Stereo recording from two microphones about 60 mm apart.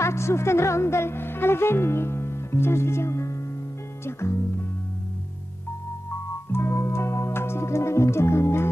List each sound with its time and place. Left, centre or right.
0.0 s speech: left
4.0 s music: left
6.5 s music: left